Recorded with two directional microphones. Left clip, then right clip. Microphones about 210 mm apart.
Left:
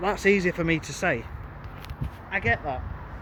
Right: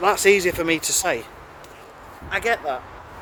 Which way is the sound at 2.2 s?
15° right (ahead or behind).